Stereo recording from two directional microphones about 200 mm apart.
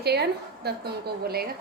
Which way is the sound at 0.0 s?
55° right (ahead or behind).